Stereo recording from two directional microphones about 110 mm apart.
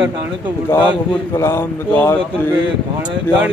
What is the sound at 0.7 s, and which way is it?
Speech, 25° left (ahead or behind).